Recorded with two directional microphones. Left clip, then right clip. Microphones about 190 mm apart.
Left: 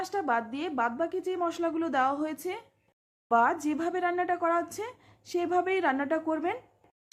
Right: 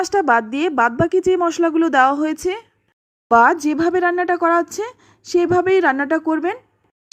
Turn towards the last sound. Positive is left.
turn(degrees=-30)  # may be behind; listen again after turning